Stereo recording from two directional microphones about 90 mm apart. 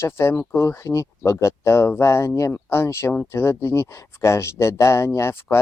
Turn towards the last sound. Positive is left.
turn(degrees=30)  # may be behind; listen again after turning